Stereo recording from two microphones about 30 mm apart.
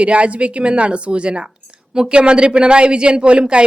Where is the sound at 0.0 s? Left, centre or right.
Right.